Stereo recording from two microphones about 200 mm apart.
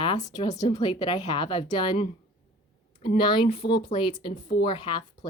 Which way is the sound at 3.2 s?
25° left (ahead or behind).